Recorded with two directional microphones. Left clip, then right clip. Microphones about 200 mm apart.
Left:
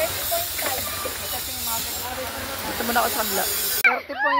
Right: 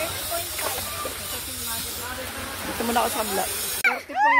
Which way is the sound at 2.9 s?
15° right (ahead or behind).